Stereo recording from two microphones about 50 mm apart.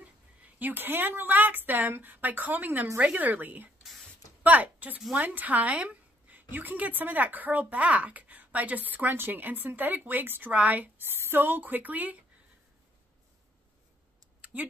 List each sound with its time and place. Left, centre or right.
0.0 s a woman's voice: right
11.0 s a woman's voice: right
14.4 s a sound: right